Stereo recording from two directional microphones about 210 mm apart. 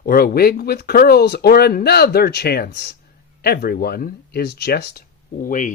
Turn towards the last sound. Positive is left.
turn(degrees=40)  # may be behind; listen again after turning